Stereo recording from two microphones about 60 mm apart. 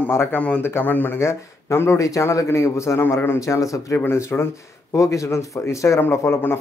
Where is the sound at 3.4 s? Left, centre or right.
Left.